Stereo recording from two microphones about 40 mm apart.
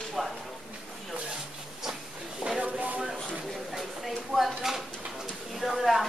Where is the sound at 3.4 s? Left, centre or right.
Centre.